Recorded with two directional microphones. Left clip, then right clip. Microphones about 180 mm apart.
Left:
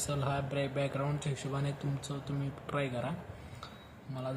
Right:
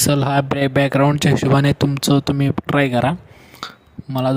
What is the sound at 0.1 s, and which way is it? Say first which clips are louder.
Speech: right 14 dB; 65° right (ahead or behind).